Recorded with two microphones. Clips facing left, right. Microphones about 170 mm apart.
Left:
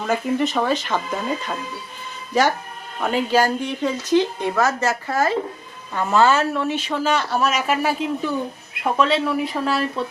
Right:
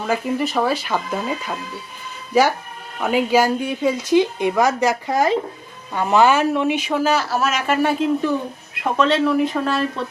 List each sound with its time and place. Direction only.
0.0 s speech: 5° right (ahead or behind)
3.0 s speech: 10° right (ahead or behind)